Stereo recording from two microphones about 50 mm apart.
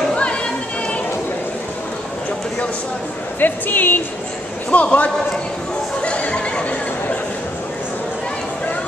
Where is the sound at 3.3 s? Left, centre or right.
Left.